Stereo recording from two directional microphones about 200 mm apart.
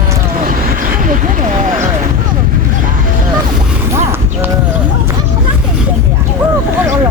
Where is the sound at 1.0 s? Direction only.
40° right (ahead or behind).